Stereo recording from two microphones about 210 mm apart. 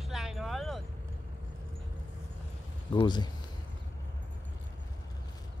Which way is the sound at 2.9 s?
20° left (ahead or behind).